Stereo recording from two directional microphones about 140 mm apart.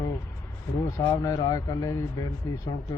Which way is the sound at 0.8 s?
25° left (ahead or behind).